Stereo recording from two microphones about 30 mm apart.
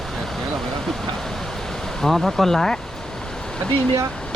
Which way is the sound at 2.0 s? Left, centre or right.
Centre.